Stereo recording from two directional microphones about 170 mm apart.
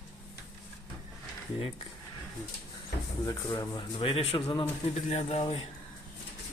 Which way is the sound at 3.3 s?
20° left (ahead or behind).